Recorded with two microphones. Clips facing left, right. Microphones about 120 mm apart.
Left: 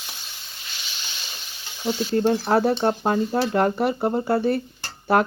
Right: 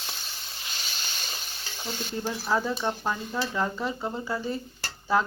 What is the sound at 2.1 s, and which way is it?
Speech, 70° left (ahead or behind).